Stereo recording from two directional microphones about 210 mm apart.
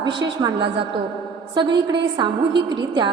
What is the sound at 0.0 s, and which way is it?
A woman's voice, 20° right (ahead or behind).